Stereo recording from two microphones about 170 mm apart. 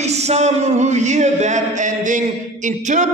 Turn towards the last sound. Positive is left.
turn(degrees=-45)  # may be behind; listen again after turning